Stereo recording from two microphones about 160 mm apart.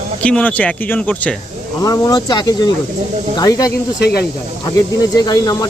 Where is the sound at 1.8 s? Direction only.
20° left (ahead or behind).